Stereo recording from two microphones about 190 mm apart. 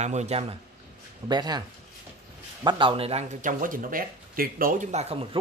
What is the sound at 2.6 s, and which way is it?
Speech, 30° right (ahead or behind).